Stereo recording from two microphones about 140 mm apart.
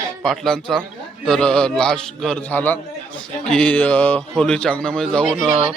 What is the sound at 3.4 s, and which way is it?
Mantra, 5° left (ahead or behind).